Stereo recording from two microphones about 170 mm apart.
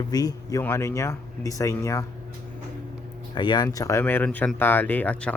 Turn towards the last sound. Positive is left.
turn(degrees=10)  # may be behind; listen again after turning